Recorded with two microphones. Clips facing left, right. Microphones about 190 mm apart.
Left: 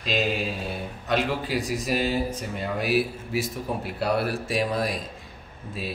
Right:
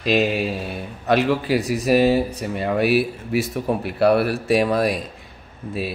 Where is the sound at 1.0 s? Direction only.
65° right (ahead or behind).